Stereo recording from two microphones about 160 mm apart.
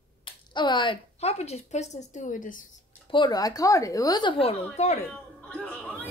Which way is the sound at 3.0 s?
30° left (ahead or behind).